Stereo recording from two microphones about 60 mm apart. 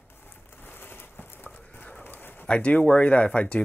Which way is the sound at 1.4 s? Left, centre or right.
Left.